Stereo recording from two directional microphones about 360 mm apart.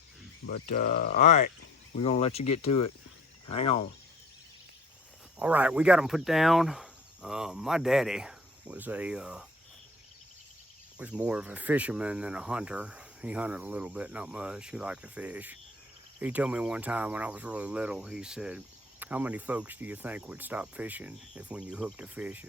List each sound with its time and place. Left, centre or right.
0.4 s speech: left
5.4 s speech: centre
10.9 s speech: centre